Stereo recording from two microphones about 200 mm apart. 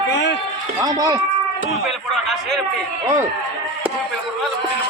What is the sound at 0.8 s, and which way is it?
Speech, 20° right (ahead or behind).